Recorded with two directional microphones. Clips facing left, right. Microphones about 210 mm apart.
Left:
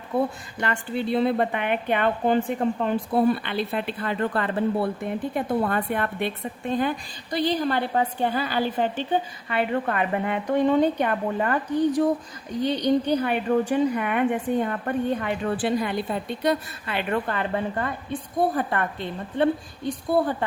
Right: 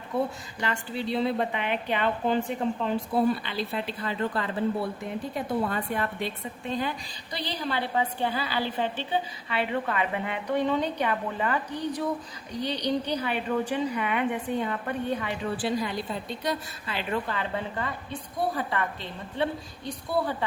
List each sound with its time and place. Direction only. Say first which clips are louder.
0.6 s speech: left 4 dB; 55° left (ahead or behind)